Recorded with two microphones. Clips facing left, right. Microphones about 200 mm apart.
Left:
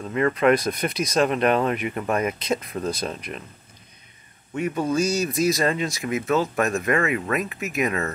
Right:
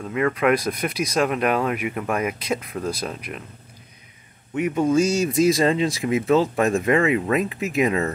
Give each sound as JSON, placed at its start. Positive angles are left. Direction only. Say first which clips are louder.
{"t": 0.1, "sound": "speech", "louder": "left 1 dB", "side_deg": -5}
{"t": 4.6, "sound": "speech", "louder": "right 4 dB", "side_deg": -20}